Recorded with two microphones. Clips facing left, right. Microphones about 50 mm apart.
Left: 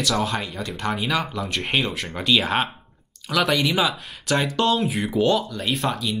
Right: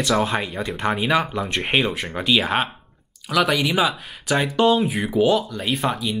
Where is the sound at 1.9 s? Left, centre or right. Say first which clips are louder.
Right 1 dB; centre.